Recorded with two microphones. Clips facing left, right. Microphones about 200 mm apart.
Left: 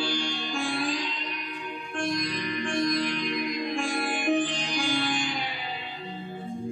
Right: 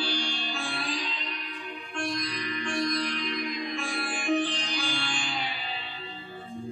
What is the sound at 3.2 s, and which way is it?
Music, 50° left (ahead or behind).